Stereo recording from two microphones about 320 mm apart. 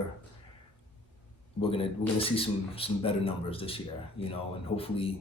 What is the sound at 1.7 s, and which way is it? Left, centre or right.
A man's voice, centre.